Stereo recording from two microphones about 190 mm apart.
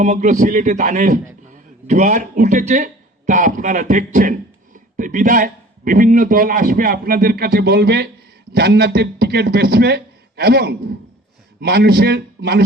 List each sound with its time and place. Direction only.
0.0 s a man's voice: 40° right (ahead or behind); by 12.6 s 55° right (ahead or behind)